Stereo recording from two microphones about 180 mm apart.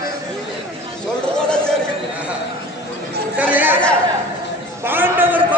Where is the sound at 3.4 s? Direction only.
10° right (ahead or behind).